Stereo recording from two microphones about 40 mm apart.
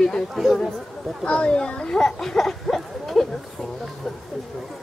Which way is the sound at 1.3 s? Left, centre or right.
Left.